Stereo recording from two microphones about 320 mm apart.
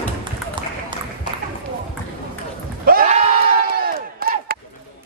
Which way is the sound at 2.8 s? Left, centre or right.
Right.